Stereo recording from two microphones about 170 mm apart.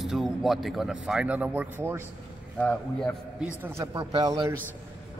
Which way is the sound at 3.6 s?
15° right (ahead or behind).